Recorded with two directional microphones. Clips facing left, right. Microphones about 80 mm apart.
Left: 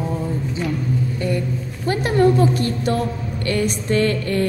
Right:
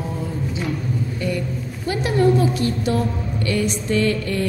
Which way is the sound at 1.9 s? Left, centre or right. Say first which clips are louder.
Left 1 dB; left.